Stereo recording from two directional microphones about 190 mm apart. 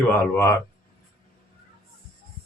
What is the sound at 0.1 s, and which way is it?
Speech, 15° left (ahead or behind).